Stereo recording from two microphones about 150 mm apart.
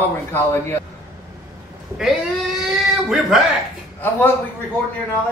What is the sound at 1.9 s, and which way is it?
A man's voice, 5° right (ahead or behind).